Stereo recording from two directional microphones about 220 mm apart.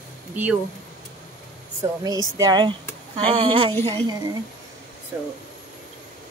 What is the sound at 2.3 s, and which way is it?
Speech, 15° right (ahead or behind).